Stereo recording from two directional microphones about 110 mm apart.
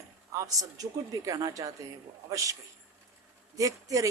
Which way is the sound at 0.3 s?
30° right (ahead or behind).